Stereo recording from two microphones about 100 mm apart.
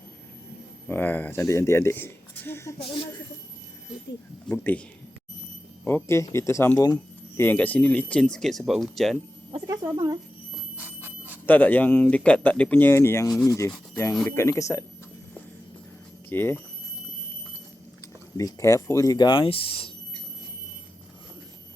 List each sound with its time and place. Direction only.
0.9 s speech: 20° left (ahead or behind)
4.5 s speech: 20° left (ahead or behind)
5.8 s speech: 25° left (ahead or behind); by 9.1 s centre (ahead or behind)
9.6 s speech: 35° right (ahead or behind)
10.8 s a sound: 20° right (ahead or behind)
11.4 s speech: 15° left (ahead or behind); by 14.8 s 35° left (ahead or behind)
16.3 s speech: 20° left (ahead or behind)
18.3 s speech: 35° left (ahead or behind); by 19.9 s 70° left (ahead or behind)